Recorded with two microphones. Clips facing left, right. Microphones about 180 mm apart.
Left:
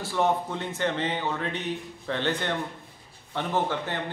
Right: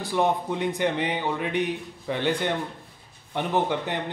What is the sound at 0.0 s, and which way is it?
A man's voice, 15° right (ahead or behind).